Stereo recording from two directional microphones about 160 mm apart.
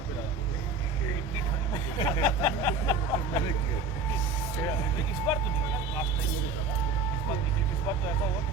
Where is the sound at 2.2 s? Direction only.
20° left (ahead or behind).